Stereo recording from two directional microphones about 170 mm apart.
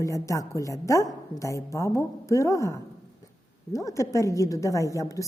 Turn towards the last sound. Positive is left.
turn(degrees=20)  # may be behind; listen again after turning